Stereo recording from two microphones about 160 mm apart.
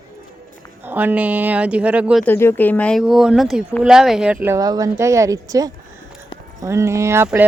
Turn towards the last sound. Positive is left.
turn(degrees=-15)  # may be behind; listen again after turning